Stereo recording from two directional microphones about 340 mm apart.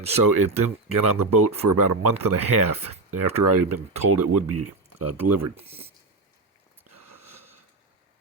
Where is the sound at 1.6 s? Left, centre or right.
Right.